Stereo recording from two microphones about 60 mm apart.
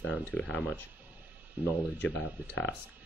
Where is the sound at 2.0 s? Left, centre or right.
Left.